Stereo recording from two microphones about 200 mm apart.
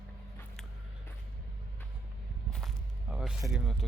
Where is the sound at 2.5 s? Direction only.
Centre (ahead or behind).